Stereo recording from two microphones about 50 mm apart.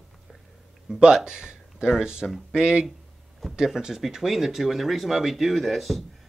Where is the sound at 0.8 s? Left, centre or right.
Centre.